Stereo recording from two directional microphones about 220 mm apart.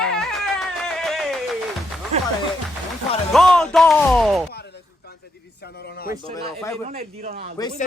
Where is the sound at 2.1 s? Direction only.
30° right (ahead or behind).